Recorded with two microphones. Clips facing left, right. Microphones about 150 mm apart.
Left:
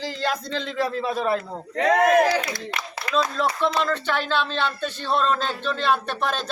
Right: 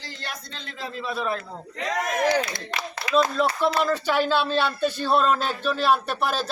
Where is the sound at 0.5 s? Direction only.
90° left; by 1.0 s 70° left (ahead or behind).